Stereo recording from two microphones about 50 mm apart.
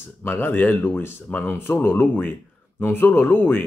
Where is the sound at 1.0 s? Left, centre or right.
Left.